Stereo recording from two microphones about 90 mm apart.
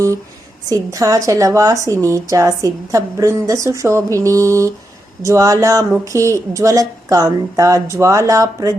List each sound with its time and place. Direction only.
0.7 s a woman's voice: 35° right (ahead or behind)